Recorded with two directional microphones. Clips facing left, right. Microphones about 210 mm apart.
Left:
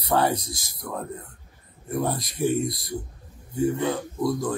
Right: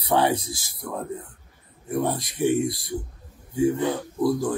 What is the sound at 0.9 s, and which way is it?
Speech, centre (ahead or behind).